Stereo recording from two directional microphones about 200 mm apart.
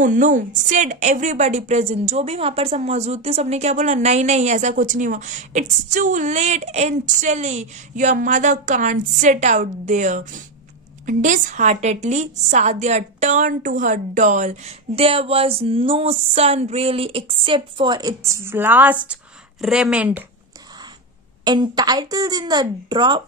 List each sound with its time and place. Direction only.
0.0 s a woman's voice: 40° right (ahead or behind); by 20.2 s 5° right (ahead or behind)
21.5 s speech: 20° right (ahead or behind)